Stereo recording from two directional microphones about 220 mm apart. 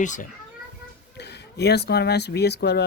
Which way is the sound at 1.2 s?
50° left (ahead or behind).